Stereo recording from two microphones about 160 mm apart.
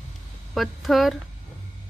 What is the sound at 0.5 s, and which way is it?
Speech, centre (ahead or behind).